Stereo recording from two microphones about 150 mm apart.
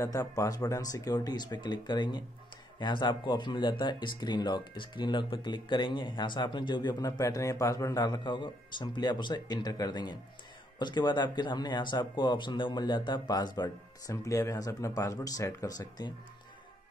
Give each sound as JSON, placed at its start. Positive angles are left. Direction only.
{"t": 0.0, "sound": "speech", "side_deg": 20}